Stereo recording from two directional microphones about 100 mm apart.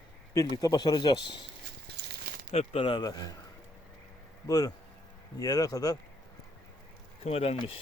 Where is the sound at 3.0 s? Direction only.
40° left (ahead or behind).